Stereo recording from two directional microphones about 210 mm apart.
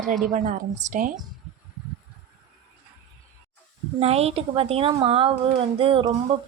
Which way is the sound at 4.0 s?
30° right (ahead or behind).